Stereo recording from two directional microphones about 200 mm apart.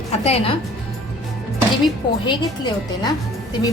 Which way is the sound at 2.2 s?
20° left (ahead or behind).